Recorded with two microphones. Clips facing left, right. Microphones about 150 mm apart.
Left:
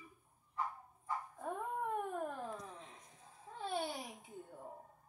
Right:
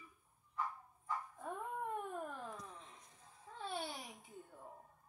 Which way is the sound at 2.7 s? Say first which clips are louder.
Left 3 dB; 70° left (ahead or behind).